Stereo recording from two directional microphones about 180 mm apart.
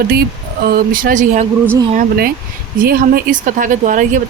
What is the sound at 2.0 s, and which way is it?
Speech, 55° right (ahead or behind).